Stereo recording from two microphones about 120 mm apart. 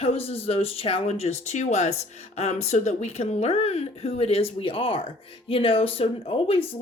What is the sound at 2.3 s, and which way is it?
Speech, 60° left (ahead or behind).